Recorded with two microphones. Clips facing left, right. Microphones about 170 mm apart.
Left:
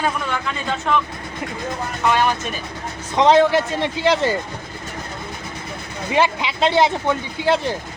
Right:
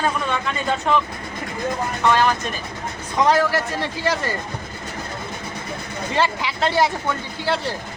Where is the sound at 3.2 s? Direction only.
25° left (ahead or behind).